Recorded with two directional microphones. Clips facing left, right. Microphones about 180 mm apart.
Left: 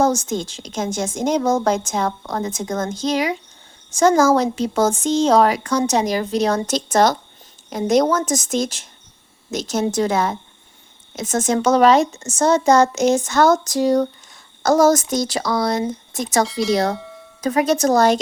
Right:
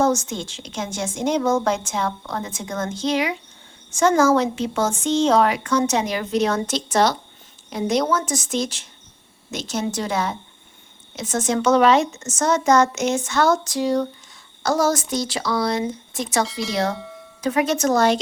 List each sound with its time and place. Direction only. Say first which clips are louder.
0.0 s a woman's voice: left 2 dB; 35° left (ahead or behind)
16.5 s speech: left 7 dB; centre (ahead or behind)
17.4 s a woman's voice: left 3 dB; 40° left (ahead or behind)